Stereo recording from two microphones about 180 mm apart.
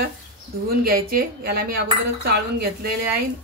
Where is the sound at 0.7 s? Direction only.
55° right (ahead or behind).